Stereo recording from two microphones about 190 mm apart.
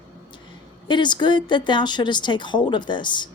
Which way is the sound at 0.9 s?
25° left (ahead or behind).